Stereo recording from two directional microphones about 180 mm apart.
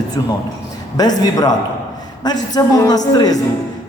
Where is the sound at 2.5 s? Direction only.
20° left (ahead or behind).